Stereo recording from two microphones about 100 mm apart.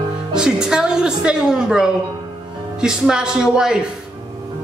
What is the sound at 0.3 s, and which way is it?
A woman's voice, 5° right (ahead or behind).